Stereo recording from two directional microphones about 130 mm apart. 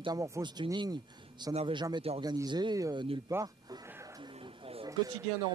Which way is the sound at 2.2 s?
30° right (ahead or behind).